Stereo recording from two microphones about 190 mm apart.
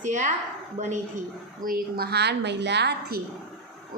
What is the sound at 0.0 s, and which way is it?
Speech, 40° right (ahead or behind).